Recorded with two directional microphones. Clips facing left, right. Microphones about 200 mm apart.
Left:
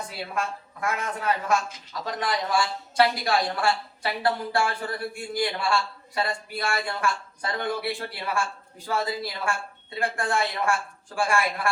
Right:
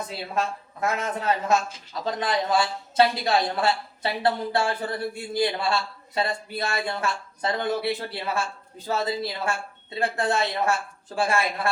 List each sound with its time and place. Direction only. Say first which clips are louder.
0.3 s a man's voice: right 4 dB; 25° right (ahead or behind)